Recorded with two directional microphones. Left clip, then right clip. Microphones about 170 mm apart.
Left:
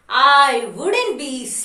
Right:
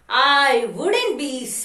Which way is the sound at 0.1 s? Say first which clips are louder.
Left 3 dB; 15° right (ahead or behind).